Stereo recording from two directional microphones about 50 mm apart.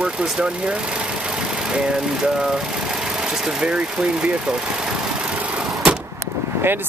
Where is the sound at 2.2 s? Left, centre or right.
Centre.